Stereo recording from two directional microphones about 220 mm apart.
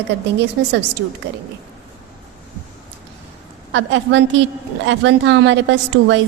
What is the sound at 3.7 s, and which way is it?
A woman's voice, 60° right (ahead or behind).